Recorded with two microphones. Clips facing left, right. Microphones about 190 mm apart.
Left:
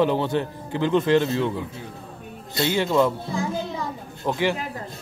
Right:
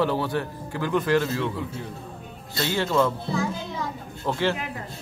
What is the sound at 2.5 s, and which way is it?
Speech, 15° left (ahead or behind).